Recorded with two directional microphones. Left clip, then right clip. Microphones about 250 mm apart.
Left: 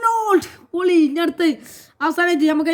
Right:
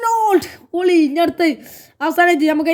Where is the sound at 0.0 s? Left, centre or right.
Centre.